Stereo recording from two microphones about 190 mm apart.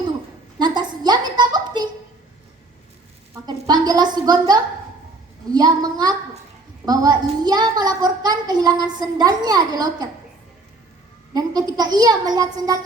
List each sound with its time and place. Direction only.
0.6 s a sound: 20° right (ahead or behind)
3.3 s a woman's voice: 20° right (ahead or behind)
11.3 s a woman's voice: 20° right (ahead or behind)